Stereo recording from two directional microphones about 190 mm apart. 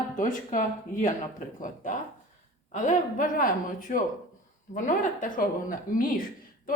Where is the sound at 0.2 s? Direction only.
40° left (ahead or behind).